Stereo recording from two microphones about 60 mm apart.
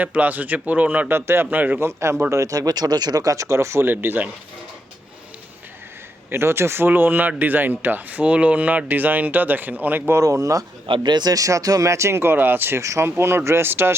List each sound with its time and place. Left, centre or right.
0.0 s speech: right
1.8 s speech: right
2.3 s speech: right
3.9 s speech: right
6.3 s speech: right
10.2 s speech: right
12.8 s speech: right